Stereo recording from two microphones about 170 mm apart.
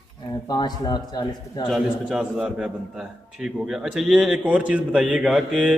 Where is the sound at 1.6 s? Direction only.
5° right (ahead or behind).